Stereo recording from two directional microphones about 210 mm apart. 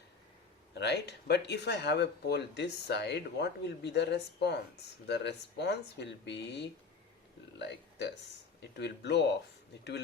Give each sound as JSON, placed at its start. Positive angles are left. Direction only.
{"t": 0.7, "sound": "speech", "side_deg": 55}